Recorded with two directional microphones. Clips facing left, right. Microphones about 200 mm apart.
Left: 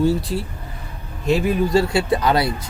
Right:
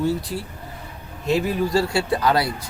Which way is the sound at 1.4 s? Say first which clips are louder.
Left 3 dB; 20° left (ahead or behind).